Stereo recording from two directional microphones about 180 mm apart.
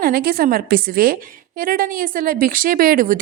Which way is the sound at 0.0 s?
55° right (ahead or behind).